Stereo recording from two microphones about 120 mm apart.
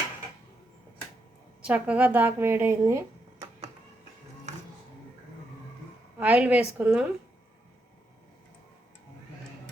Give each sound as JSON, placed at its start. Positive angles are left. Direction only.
{"t": 1.6, "sound": "a woman's voice", "side_deg": -10}
{"t": 6.1, "sound": "a woman's voice", "side_deg": -10}